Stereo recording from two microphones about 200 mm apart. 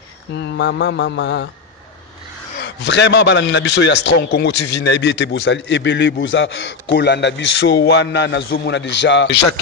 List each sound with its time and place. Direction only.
0.3 s a man's voice: 60° left (ahead or behind)
2.6 s a man's voice: 60° left (ahead or behind)